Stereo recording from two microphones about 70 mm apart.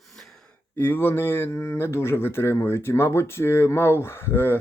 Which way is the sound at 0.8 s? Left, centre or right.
Left.